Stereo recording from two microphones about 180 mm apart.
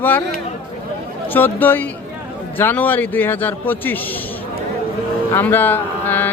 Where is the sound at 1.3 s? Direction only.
10° left (ahead or behind).